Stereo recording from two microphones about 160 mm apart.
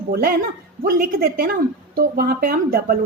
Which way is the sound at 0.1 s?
70° right (ahead or behind).